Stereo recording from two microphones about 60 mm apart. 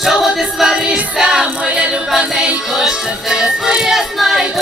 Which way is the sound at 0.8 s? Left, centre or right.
Centre.